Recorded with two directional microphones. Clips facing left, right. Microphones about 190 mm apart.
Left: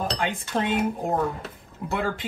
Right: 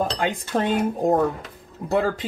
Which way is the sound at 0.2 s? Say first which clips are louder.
Right 3 dB; 40° right (ahead or behind).